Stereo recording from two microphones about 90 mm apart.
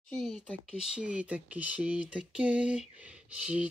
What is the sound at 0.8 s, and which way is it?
Speech, 10° right (ahead or behind).